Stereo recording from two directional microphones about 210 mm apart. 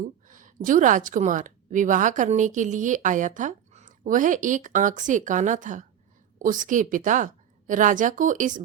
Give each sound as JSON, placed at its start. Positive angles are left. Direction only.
{"t": 0.3, "sound": "a woman's voice", "side_deg": -40}